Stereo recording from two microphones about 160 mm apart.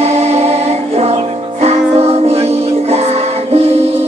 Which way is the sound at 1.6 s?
40° right (ahead or behind).